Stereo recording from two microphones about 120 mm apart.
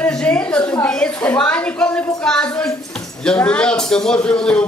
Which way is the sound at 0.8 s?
10° left (ahead or behind).